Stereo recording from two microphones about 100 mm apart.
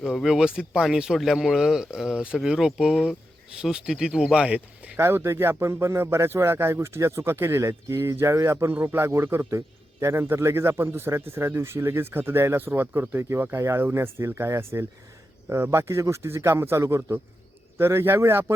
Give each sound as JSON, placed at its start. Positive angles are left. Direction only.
{"t": 0.0, "sound": "speech", "side_deg": 0}
{"t": 4.9, "sound": "speech", "side_deg": -25}